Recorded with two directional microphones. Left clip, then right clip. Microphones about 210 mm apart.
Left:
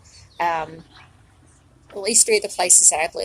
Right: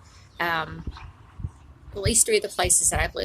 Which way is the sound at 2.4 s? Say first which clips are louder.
Left 6 dB; 55° right (ahead or behind).